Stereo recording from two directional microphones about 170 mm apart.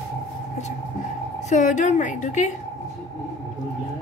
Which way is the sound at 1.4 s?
45° left (ahead or behind).